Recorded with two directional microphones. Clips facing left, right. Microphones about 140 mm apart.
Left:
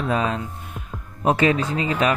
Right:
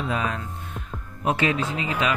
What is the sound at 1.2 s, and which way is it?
Speech, 40° left (ahead or behind).